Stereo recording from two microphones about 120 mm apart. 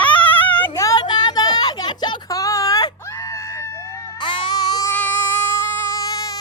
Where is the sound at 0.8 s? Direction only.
30° left (ahead or behind).